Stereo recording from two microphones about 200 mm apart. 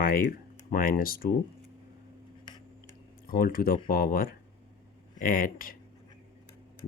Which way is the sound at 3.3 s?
45° left (ahead or behind).